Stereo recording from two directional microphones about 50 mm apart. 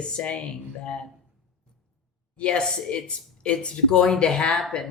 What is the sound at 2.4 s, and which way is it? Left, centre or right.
Speech, left.